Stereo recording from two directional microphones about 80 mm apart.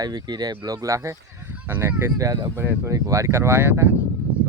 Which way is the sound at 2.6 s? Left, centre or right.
Right.